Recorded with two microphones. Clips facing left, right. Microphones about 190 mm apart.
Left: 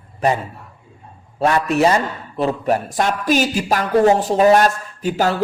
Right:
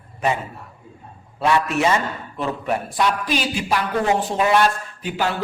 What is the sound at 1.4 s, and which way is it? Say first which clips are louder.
A man's voice: left 3 dB; 40° left (ahead or behind).